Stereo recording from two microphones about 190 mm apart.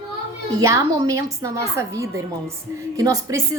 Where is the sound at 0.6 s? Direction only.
20° right (ahead or behind).